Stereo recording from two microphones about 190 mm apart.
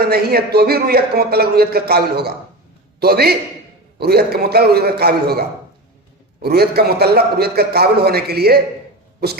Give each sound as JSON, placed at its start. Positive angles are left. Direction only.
{"t": 0.0, "sound": "speech", "side_deg": -55}